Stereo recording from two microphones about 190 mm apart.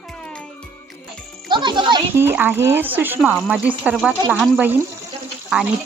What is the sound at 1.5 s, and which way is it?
Speech, 25° right (ahead or behind).